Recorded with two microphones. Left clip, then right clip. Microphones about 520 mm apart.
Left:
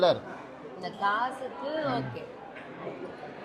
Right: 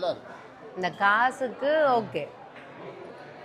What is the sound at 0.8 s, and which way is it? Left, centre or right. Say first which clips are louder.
Speech: right 6 dB; right.